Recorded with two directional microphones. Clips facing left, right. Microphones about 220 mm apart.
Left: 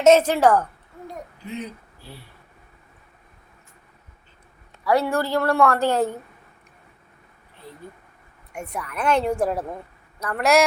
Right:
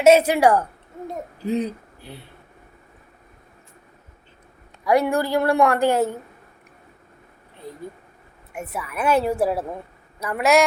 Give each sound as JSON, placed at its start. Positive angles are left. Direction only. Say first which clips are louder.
{"t": 0.0, "sound": "a woman's voice", "louder": "right 1 dB", "side_deg": -10}
{"t": 1.5, "sound": "speech", "louder": "right 10 dB", "side_deg": -35}
{"t": 2.0, "sound": "speech", "louder": "right 3 dB", "side_deg": -20}
{"t": 4.8, "sound": "a woman's voice", "louder": "right 2 dB", "side_deg": -15}
{"t": 8.5, "sound": "a woman's voice", "louder": "right 1 dB", "side_deg": -5}